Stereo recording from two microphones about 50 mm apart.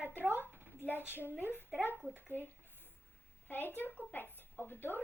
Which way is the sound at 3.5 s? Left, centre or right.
Left.